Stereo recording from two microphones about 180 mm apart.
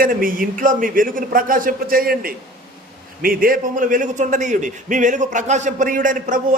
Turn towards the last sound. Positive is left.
turn(degrees=-45)  # may be behind; listen again after turning